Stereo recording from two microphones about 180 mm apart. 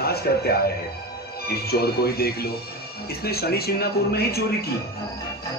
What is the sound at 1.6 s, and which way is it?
A man's voice, 60° left (ahead or behind).